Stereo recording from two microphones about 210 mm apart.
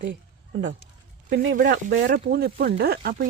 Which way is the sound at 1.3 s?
65° right (ahead or behind).